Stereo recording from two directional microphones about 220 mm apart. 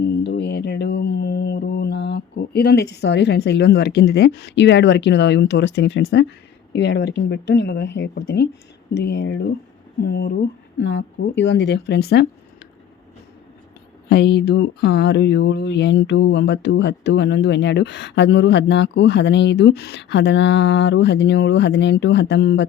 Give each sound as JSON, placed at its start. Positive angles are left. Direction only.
{"t": 0.0, "sound": "a sound", "side_deg": 50}
{"t": 6.7, "sound": "speech", "side_deg": 50}
{"t": 14.1, "sound": "speech", "side_deg": 50}